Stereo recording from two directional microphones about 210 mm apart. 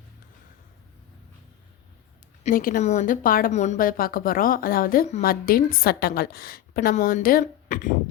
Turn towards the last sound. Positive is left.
turn(degrees=40)  # may be behind; listen again after turning